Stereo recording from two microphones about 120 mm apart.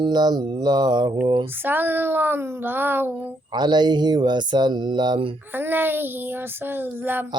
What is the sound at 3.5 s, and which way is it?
Mantra, 35° right (ahead or behind).